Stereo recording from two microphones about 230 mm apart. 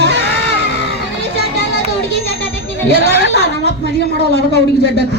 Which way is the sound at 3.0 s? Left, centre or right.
Left.